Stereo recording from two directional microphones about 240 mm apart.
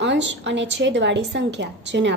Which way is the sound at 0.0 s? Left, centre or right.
Right.